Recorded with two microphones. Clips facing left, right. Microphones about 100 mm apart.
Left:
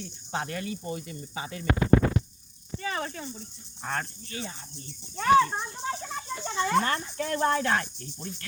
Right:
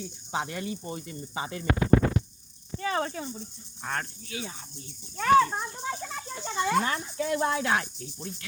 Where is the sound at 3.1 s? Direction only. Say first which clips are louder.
Right 3 dB; 15° right (ahead or behind).